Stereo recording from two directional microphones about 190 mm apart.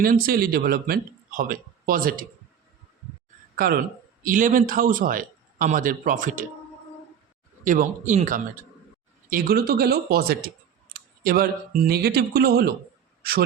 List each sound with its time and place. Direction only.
0.0 s a man's voice: 50° right (ahead or behind)
3.6 s a man's voice: 50° right (ahead or behind)
7.6 s a man's voice: 45° right (ahead or behind)
9.3 s a man's voice: 55° right (ahead or behind)